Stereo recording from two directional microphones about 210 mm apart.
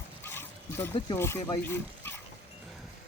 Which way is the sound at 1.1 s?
15° left (ahead or behind).